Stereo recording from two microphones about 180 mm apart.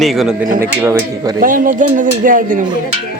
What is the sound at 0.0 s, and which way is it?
Speech, centre (ahead or behind).